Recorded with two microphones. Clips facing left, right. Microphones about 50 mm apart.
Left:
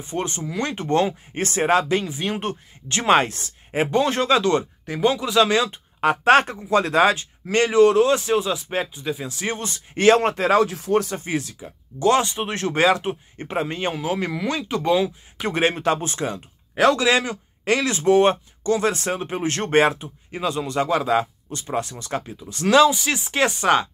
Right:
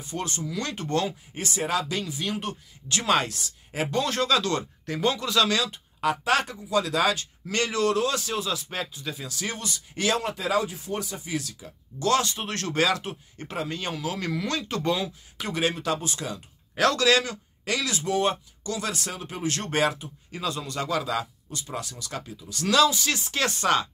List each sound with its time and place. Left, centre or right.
0.0 s speech: left
1.3 s speech: left
4.8 s speech: centre
5.9 s speech: left
11.2 s speech: left
15.4 s speech: left
16.7 s speech: left